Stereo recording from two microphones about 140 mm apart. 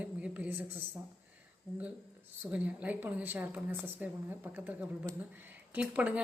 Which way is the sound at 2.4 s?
10° right (ahead or behind).